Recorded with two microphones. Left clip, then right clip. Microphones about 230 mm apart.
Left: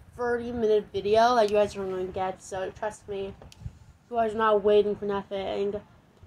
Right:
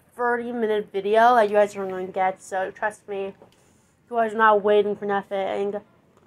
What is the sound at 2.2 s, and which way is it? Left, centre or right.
Speech, centre.